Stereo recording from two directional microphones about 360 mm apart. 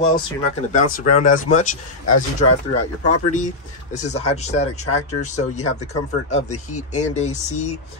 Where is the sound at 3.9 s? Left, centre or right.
Centre.